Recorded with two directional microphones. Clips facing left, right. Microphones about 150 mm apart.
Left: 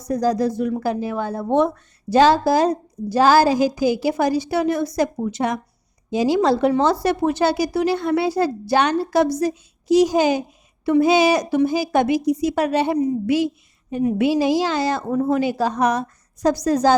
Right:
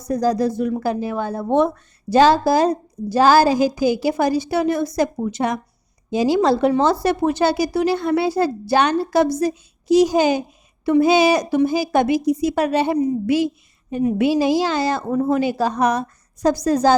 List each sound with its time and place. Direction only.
0.0 s speech: 30° right (ahead or behind)